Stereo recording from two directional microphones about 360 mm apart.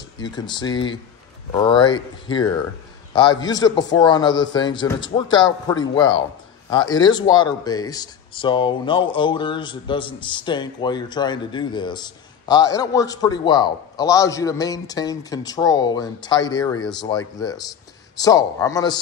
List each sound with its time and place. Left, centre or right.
0.2 s speech: centre